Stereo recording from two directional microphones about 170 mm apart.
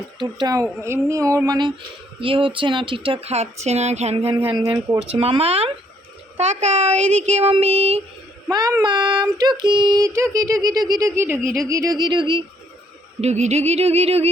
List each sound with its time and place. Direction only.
0.2 s speech: 25° right (ahead or behind)
8.4 s speech: 20° right (ahead or behind)
11.4 s speech: 5° left (ahead or behind)
11.7 s speech: 20° right (ahead or behind)
13.2 s speech: 40° right (ahead or behind)